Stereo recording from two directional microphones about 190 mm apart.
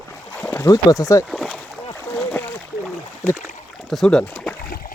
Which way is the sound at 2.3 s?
10° left (ahead or behind).